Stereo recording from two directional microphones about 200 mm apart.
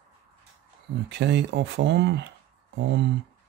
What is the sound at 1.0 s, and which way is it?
Speech, 60° right (ahead or behind).